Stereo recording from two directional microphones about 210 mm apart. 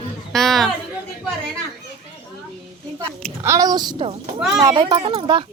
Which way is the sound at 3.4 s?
15° right (ahead or behind).